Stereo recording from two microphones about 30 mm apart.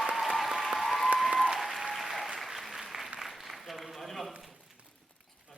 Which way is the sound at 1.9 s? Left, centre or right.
Centre.